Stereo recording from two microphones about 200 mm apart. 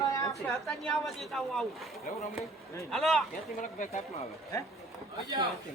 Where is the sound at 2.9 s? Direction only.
Centre (ahead or behind).